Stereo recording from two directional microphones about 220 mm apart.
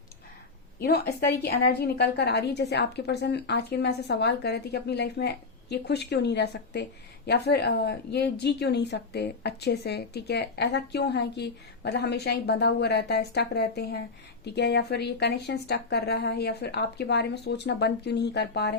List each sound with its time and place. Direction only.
0.8 s a woman's voice: 45° left (ahead or behind)